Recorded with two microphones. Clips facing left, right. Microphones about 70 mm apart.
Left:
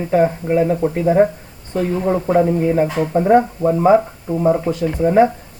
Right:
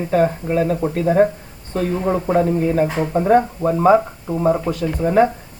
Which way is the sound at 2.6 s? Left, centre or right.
Centre.